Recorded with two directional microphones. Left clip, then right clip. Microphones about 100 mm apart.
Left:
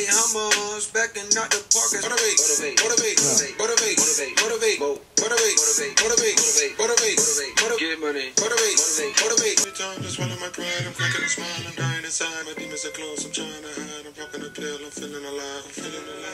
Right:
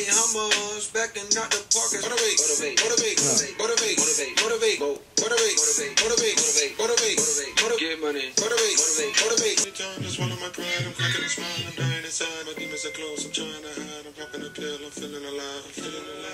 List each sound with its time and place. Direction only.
0.3 s music: 40° left (ahead or behind)